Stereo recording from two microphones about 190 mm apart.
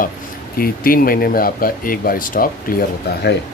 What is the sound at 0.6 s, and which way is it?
Speech, 50° left (ahead or behind).